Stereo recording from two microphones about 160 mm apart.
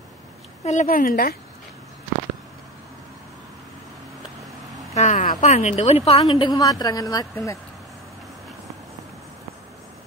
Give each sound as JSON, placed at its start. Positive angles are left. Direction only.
{"t": 0.7, "sound": "speech", "side_deg": 55}
{"t": 4.9, "sound": "a sound", "side_deg": 50}
{"t": 5.4, "sound": "speech", "side_deg": 45}
{"t": 6.2, "sound": "a woman's voice", "side_deg": 30}